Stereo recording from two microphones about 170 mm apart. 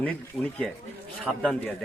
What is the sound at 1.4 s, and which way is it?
Speech, 5° left (ahead or behind).